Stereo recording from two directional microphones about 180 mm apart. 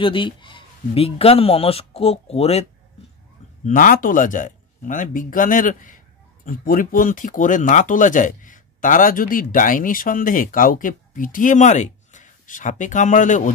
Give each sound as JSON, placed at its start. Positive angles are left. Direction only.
{"t": 0.0, "sound": "speech", "side_deg": 30}
{"t": 3.6, "sound": "speech", "side_deg": 50}